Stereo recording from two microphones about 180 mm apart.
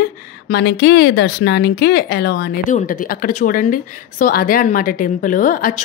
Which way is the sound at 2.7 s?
50° left (ahead or behind).